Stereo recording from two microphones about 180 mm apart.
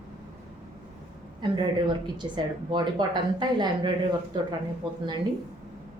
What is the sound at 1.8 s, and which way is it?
A woman's voice, 25° right (ahead or behind).